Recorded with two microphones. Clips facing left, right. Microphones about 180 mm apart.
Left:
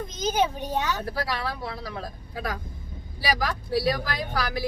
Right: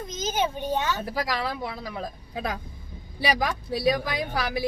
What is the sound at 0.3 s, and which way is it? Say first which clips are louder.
Speech: even; centre (ahead or behind).